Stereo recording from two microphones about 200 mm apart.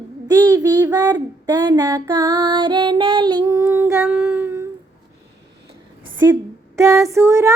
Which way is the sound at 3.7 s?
10° right (ahead or behind).